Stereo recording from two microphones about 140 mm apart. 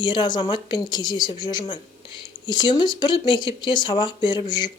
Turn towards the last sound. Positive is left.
turn(degrees=35)  # may be behind; listen again after turning